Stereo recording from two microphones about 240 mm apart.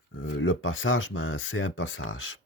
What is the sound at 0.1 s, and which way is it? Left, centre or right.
Speech, left.